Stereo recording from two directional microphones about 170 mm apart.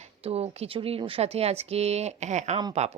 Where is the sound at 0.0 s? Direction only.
35° right (ahead or behind).